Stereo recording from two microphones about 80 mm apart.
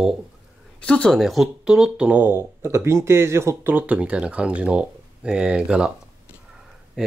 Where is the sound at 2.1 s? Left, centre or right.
Right.